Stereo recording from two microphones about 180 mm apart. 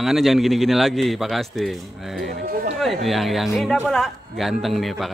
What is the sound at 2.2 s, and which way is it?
Speech, 55° right (ahead or behind).